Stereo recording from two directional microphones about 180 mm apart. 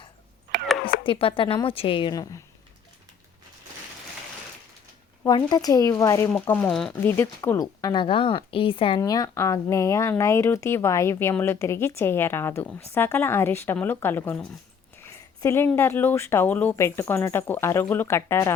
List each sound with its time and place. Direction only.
1.0 s speech: 30° left (ahead or behind)
5.2 s speech: 25° left (ahead or behind)
6.3 s speech: 10° left (ahead or behind); by 9.0 s 30° left (ahead or behind)
9.0 s speech: 20° left (ahead or behind)